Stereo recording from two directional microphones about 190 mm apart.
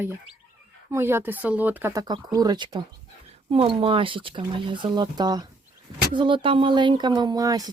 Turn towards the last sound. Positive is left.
turn(degrees=-20)  # may be behind; listen again after turning